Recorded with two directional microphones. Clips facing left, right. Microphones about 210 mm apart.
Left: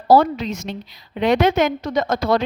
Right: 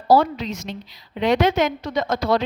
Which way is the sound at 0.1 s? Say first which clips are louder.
Left 2 dB; 50° left (ahead or behind).